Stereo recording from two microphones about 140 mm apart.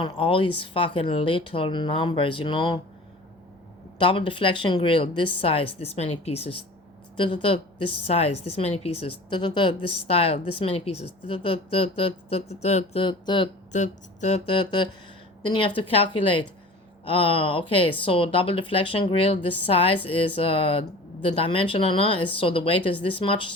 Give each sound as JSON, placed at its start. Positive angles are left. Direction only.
{"t": 0.0, "sound": "speech", "side_deg": 35}
{"t": 3.9, "sound": "speech", "side_deg": 35}
{"t": 7.2, "sound": "a woman's voice", "side_deg": 35}
{"t": 13.7, "sound": "a woman's voice", "side_deg": 55}